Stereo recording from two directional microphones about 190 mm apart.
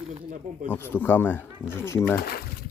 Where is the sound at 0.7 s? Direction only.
10° left (ahead or behind).